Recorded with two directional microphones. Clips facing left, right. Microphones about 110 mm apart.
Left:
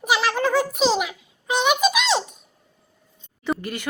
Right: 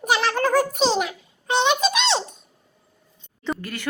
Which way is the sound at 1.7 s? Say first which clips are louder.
Left 1 dB; 30° right (ahead or behind).